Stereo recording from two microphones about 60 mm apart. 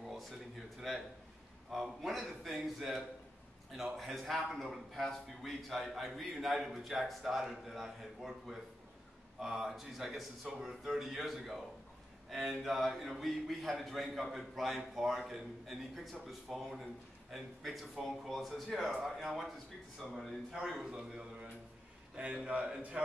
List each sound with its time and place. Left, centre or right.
0.7 s a man's voice: centre; by 22.9 s right